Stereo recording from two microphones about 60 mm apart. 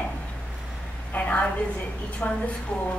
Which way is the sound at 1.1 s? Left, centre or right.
Left.